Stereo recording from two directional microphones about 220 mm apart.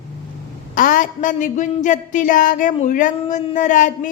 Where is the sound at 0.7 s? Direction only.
40° left (ahead or behind).